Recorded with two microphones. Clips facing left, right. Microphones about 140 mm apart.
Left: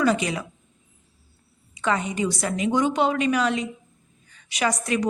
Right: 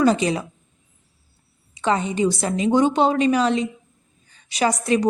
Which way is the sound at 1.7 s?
30° right (ahead or behind).